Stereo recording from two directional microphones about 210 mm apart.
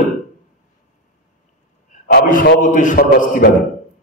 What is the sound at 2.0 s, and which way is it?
A man's voice, 45° left (ahead or behind).